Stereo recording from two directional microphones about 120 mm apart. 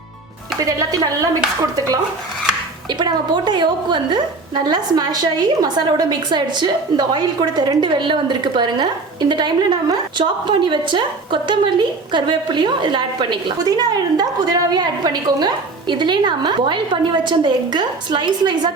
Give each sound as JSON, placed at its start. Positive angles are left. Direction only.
{"t": 0.6, "sound": "a woman's voice", "side_deg": -30}